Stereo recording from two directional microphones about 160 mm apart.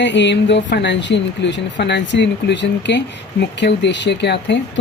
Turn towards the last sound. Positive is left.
turn(degrees=90)